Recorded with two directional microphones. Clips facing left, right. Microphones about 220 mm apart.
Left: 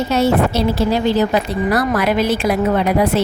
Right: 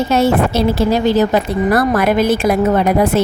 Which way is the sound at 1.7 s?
50° right (ahead or behind).